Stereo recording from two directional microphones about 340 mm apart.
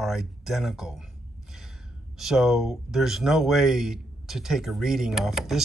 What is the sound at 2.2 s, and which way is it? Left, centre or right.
Speech, centre.